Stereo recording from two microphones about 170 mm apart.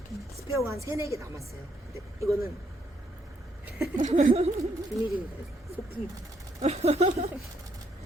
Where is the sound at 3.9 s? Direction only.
45° right (ahead or behind).